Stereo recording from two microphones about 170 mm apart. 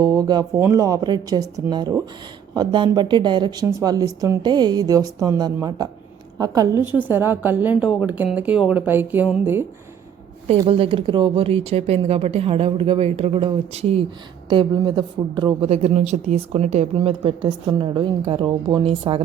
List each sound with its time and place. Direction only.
0.0 s a woman's voice: 25° right (ahead or behind)
10.7 s a woman's voice: 30° right (ahead or behind)
15.7 s speech: 40° right (ahead or behind)